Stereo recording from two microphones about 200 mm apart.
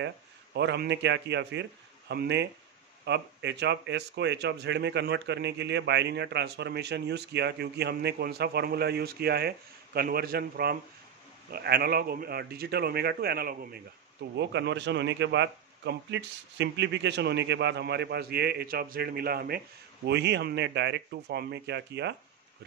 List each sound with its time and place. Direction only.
0.6 s a man's voice: 60° right (ahead or behind)